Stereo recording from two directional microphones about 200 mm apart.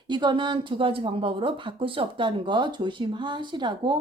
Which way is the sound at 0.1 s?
25° right (ahead or behind).